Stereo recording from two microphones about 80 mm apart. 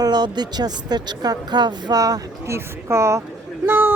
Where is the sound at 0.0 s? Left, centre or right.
Right.